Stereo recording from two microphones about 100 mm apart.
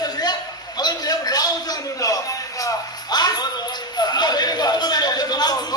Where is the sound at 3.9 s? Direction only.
45° left (ahead or behind).